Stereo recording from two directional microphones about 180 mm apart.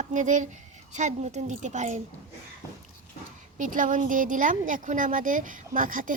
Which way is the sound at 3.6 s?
45° right (ahead or behind).